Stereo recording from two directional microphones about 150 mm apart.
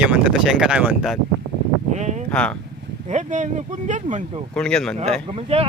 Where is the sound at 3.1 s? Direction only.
55° right (ahead or behind).